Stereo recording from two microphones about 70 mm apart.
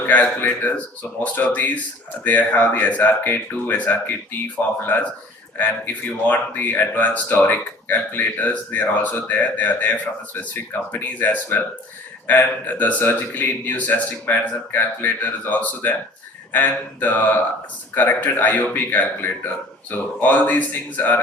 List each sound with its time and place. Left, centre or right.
0.0 s a sound: left
1.5 s speech: left
5.5 s speech: left